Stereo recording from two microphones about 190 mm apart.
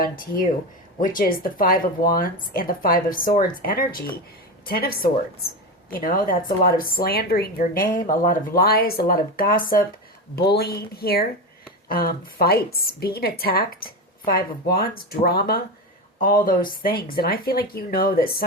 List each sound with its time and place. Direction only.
1.0 s speech: 45° left (ahead or behind)